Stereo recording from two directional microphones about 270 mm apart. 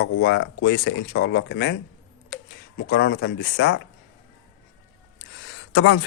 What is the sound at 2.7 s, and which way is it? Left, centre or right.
Speech, left.